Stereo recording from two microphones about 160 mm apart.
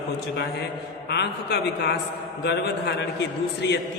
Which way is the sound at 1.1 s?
90° left.